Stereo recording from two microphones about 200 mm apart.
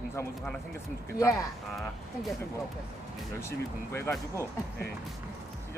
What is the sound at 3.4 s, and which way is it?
Speech, 15° left (ahead or behind).